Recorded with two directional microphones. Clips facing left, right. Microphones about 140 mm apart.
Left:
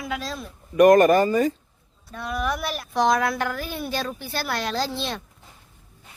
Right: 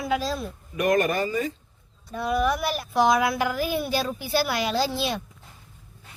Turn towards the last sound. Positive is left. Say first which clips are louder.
# right 2 dB
turn(degrees=-5)  # may be behind; listen again after turning